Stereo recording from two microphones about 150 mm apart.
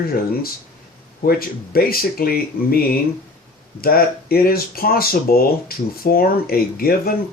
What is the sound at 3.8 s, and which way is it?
Speech, 90° left.